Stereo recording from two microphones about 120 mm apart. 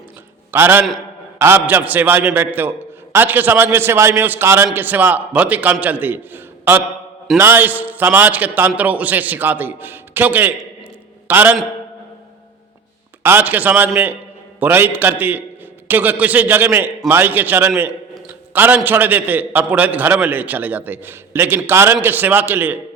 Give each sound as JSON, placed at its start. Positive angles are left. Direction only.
{"t": 0.5, "sound": "a man's voice", "side_deg": -20}
{"t": 13.2, "sound": "a man's voice", "side_deg": -15}
{"t": 18.3, "sound": "a sound", "side_deg": -15}
{"t": 18.9, "sound": "a man's voice", "side_deg": -15}